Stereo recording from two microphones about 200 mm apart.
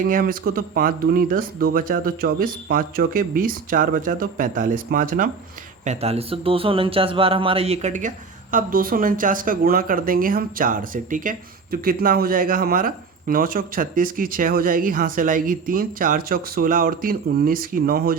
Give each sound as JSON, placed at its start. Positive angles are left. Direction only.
{"t": 0.0, "sound": "a man's voice", "side_deg": -45}
{"t": 5.8, "sound": "a man's voice", "side_deg": -35}